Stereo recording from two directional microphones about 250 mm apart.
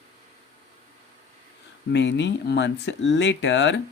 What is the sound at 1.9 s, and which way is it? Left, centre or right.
Speech, left.